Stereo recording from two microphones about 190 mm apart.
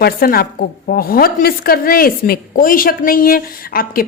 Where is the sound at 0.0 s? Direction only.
50° left (ahead or behind).